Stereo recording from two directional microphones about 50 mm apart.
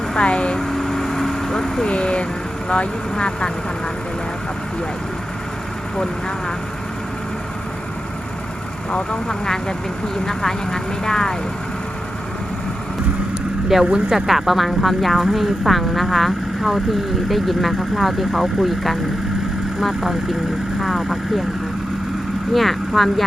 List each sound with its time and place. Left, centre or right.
0.1 s speech: centre
0.6 s vehicle: centre
1.9 s speech: left
8.9 s speech: centre
13.8 s speech: centre
22.5 s speech: centre